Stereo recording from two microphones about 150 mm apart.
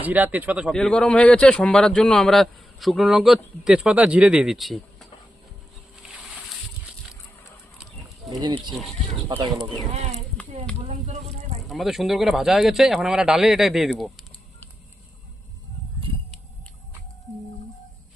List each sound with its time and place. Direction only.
0.0 s speech: 10° right (ahead or behind)
0.7 s a man's voice: 5° left (ahead or behind)
6.1 s boat: 5° right (ahead or behind)
8.3 s speech: 25° right (ahead or behind)
9.9 s speech: 45° right (ahead or behind)
10.8 s a sound: 45° right (ahead or behind)
11.7 s a man's voice: centre (ahead or behind)